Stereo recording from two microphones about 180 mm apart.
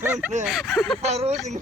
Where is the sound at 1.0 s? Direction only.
35° right (ahead or behind).